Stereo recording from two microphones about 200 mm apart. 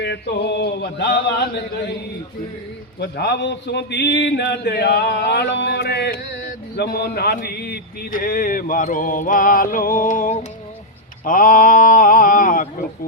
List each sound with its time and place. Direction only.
0.0 s a man's voice: 60° left (ahead or behind)
3.0 s a man's voice: 55° left (ahead or behind)
11.3 s a sound: 40° left (ahead or behind)